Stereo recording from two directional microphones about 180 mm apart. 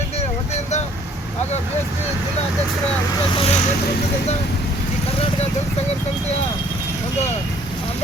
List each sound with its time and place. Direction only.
0.2 s vehicle: 40° left (ahead or behind)
3.3 s speech: 35° left (ahead or behind)